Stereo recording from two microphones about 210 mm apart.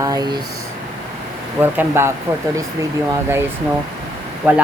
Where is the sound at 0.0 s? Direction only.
20° right (ahead or behind).